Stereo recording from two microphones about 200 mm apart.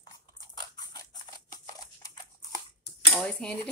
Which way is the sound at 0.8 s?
20° left (ahead or behind).